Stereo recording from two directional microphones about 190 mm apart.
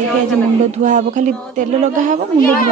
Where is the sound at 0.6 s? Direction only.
40° right (ahead or behind).